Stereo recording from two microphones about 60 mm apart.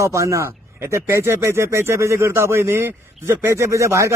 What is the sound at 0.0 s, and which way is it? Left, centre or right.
Speech, right.